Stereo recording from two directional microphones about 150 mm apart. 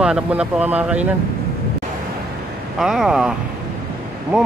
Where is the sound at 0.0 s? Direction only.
5° right (ahead or behind).